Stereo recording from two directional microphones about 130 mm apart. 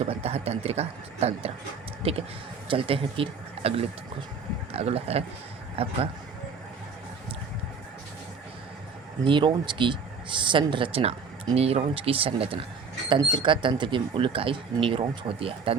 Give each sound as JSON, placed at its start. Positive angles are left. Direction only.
{"t": 0.0, "sound": "a man's voice", "side_deg": -50}
{"t": 9.2, "sound": "a man's voice", "side_deg": -40}